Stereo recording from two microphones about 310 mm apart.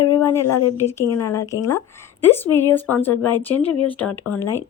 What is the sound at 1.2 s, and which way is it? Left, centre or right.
Speech, centre.